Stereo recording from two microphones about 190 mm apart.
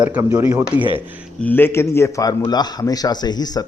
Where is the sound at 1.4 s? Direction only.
10° left (ahead or behind).